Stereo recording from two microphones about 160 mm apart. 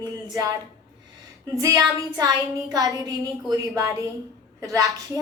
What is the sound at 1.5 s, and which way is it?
A woman's voice, 20° right (ahead or behind).